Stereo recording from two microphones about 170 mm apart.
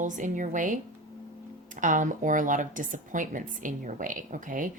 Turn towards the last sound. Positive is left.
turn(degrees=-50)  # may be behind; listen again after turning